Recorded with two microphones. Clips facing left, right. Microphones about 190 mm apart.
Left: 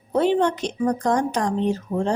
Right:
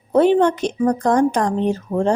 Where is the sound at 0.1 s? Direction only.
55° right (ahead or behind).